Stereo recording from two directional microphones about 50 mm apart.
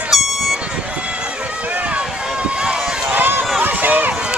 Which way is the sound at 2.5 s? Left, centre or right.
Centre.